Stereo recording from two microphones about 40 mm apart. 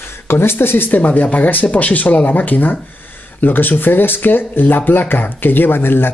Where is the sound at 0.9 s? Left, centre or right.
Left.